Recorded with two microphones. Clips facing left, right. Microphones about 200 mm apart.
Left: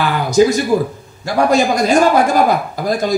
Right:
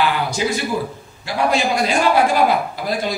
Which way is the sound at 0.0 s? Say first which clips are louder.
Left 7 dB; 45° left (ahead or behind).